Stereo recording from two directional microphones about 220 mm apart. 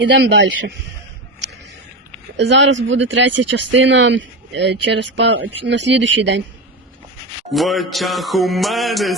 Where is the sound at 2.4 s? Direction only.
55° right (ahead or behind).